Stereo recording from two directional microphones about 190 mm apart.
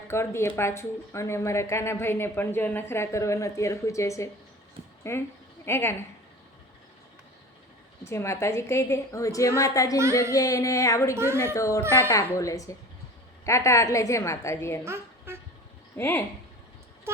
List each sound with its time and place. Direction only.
0.1 s speech: 15° left (ahead or behind)
8.0 s speech: 15° left (ahead or behind)
11.1 s a woman's voice: 15° right (ahead or behind)
11.5 s speech: 15° left (ahead or behind)
14.8 s a sound: 10° right (ahead or behind)
16.0 s speech: 10° left (ahead or behind)